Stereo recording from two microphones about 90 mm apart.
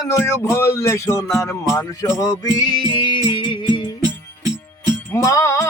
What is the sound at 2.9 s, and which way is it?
Music, 65° left (ahead or behind).